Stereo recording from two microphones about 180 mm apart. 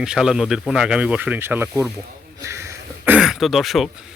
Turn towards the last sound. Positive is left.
turn(degrees=0)  # may be behind; listen again after turning